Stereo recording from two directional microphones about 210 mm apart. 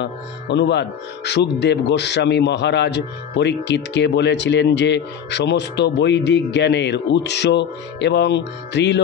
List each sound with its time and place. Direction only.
0.0 s speech: 55° left (ahead or behind)